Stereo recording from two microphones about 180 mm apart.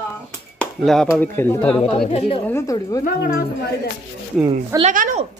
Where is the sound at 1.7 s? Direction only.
30° left (ahead or behind).